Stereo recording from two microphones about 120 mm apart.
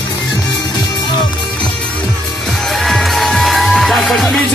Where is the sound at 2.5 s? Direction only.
Centre (ahead or behind).